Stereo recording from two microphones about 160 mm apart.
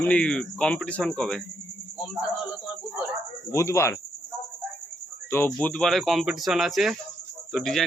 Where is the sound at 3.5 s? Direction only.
20° left (ahead or behind).